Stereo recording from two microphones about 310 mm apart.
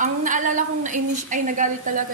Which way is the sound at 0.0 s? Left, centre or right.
Right.